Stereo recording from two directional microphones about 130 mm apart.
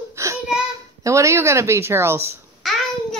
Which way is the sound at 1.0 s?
25° right (ahead or behind).